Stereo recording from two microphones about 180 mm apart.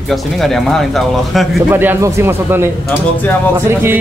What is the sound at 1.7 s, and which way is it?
Speech, 10° right (ahead or behind).